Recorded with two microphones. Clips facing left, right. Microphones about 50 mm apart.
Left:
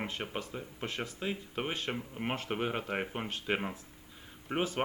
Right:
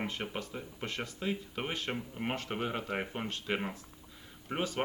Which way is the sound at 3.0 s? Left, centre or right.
Centre.